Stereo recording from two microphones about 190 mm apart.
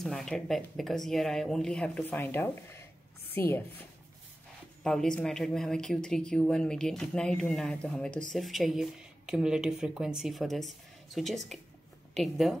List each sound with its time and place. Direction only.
0.0 s a woman's voice: centre (ahead or behind)
4.8 s speech: 5° left (ahead or behind)